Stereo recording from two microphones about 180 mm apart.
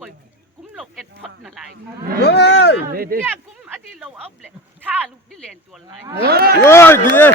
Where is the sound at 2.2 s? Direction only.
70° left (ahead or behind).